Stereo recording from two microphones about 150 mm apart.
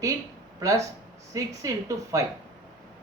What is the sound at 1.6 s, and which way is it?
Speech, 25° right (ahead or behind).